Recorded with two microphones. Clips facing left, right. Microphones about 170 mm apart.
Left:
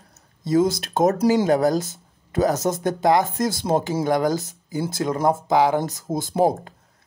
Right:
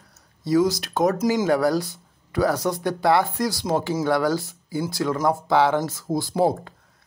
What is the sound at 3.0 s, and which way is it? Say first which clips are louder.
Speech: left 1 dB; 15° left (ahead or behind).